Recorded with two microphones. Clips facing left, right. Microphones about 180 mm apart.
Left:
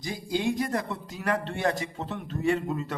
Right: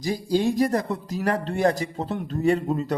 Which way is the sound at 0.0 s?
40° right (ahead or behind).